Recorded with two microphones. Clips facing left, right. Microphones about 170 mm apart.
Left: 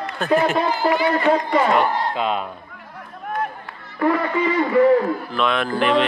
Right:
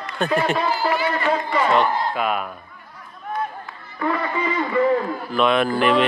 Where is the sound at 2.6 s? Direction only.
75° left (ahead or behind).